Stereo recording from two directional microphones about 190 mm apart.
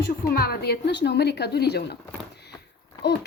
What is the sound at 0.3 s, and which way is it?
Speech, 55° left (ahead or behind).